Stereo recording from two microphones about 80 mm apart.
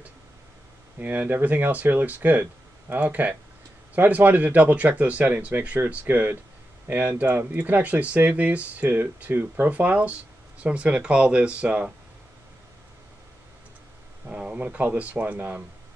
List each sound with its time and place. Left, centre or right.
0.9 s speech: right
14.2 s speech: centre